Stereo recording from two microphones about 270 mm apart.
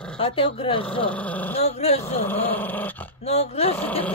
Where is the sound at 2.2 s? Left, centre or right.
Centre.